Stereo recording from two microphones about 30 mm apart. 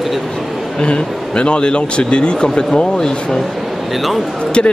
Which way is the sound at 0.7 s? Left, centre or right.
Left.